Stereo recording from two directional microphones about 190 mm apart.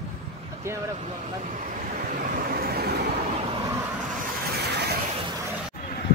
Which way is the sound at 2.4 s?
50° right (ahead or behind).